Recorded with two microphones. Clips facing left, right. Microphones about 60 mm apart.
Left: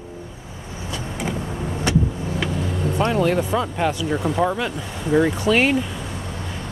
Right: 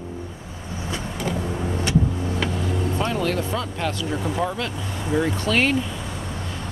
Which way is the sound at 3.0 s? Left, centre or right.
Centre.